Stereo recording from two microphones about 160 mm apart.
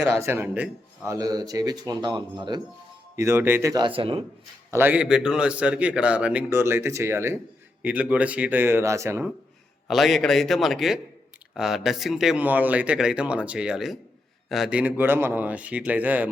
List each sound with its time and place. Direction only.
0.0 s speech: 15° right (ahead or behind)
3.2 s speech: 15° right (ahead or behind); by 4.2 s 35° right (ahead or behind)
4.7 s a man's voice: 10° right (ahead or behind)
9.9 s a man's voice: centre (ahead or behind)